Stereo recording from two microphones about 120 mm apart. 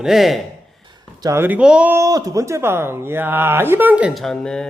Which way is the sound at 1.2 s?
25° right (ahead or behind).